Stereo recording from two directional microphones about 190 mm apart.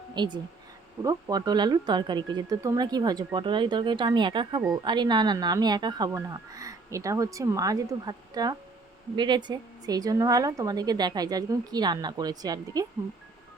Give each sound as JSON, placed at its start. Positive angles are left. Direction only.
{"t": 0.1, "sound": "speech", "side_deg": -25}